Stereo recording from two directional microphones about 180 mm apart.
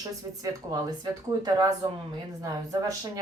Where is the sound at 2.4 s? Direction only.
20° right (ahead or behind).